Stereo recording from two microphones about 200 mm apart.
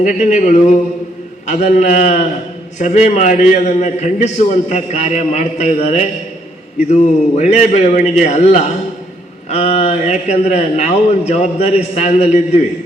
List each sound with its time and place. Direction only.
0.0 s a man's voice: 35° left (ahead or behind)